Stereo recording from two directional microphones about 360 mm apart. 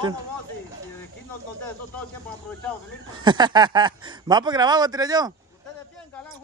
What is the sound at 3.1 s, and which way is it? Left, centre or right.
Speech, centre.